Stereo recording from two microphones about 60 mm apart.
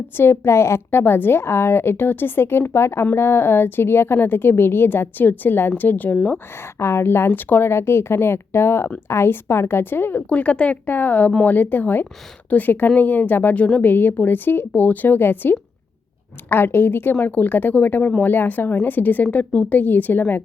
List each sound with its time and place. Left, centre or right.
0.2 s a woman's voice: left
6.1 s a woman's voice: centre
6.7 s a woman's voice: left
10.2 s a woman's voice: left